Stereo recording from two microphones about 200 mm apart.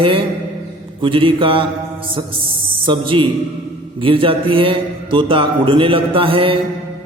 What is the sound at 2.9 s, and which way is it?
A man's voice, 25° right (ahead or behind).